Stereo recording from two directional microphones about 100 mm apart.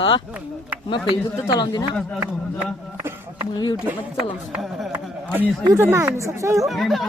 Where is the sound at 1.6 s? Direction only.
40° left (ahead or behind).